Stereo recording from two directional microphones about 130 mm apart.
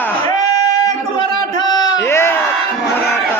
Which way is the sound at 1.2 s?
35° left (ahead or behind).